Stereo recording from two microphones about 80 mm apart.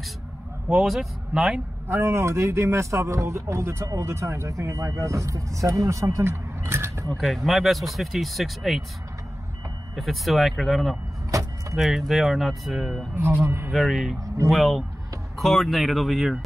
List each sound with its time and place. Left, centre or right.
0.7 s speech: centre
1.9 s speech: right
7.1 s speech: centre
9.9 s speech: centre
13.1 s speech: right
13.7 s speech: centre